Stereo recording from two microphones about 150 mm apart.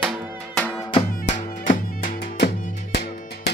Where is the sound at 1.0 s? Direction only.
55° left (ahead or behind).